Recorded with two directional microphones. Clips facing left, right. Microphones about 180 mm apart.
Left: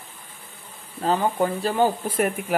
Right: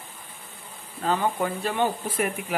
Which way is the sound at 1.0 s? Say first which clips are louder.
Left 3 dB; 35° left (ahead or behind).